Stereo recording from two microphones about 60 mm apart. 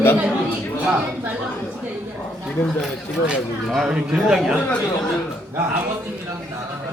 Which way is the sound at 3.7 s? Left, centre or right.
Centre.